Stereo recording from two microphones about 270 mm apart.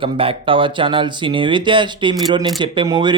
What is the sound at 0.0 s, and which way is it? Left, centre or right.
Speech, centre.